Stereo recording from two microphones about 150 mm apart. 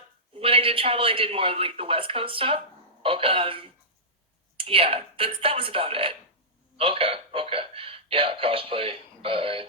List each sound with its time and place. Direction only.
0.3 s a man's voice: 40° right (ahead or behind)